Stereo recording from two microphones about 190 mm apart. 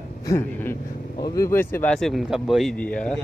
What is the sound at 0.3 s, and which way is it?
Speech, 15° left (ahead or behind).